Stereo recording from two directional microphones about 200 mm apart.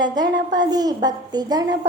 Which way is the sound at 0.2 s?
20° right (ahead or behind).